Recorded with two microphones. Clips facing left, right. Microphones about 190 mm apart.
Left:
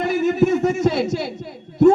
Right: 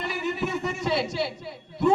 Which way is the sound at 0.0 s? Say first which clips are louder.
Left 11 dB; 45° left (ahead or behind).